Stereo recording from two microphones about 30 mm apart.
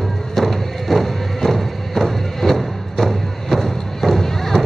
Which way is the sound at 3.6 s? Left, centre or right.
Centre.